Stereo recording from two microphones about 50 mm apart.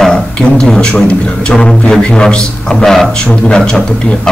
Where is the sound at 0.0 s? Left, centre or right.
Centre.